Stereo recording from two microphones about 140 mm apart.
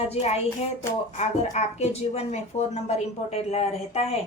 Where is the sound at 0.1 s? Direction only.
50° left (ahead or behind).